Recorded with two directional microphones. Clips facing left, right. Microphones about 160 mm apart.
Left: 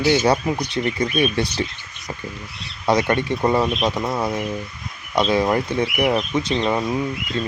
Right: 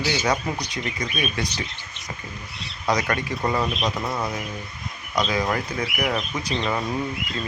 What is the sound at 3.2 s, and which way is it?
Speech, 25° left (ahead or behind).